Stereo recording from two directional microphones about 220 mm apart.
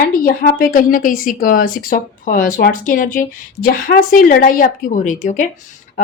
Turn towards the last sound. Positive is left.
turn(degrees=35)  # may be behind; listen again after turning